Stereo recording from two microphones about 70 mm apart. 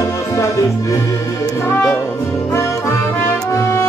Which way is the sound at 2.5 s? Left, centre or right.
Left.